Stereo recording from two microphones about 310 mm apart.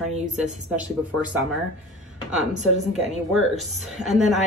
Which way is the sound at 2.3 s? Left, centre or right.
Right.